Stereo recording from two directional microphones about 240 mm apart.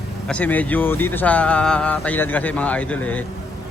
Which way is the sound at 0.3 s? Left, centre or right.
Centre.